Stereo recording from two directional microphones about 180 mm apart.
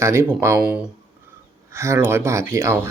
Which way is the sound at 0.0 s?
15° right (ahead or behind).